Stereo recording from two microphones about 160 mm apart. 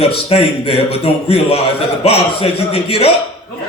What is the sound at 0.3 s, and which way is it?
Speech, 40° left (ahead or behind).